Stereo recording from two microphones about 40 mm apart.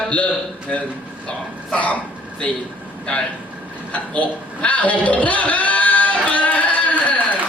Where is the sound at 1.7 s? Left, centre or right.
Left.